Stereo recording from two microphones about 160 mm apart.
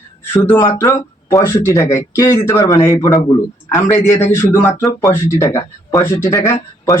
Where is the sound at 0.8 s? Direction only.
20° left (ahead or behind).